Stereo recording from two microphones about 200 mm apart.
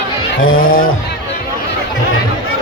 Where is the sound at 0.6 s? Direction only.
45° left (ahead or behind).